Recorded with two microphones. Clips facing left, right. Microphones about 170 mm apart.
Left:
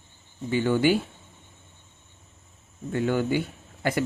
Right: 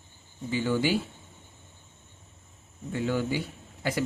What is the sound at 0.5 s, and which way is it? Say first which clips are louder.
Speech: left 5 dB; 60° left (ahead or behind).